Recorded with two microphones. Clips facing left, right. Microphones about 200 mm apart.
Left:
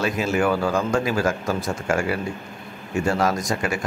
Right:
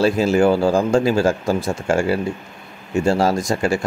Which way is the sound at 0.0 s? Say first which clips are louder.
Right 6 dB; 30° right (ahead or behind).